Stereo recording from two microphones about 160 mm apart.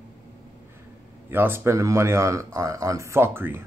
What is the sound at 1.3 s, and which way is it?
Speech, 15° right (ahead or behind).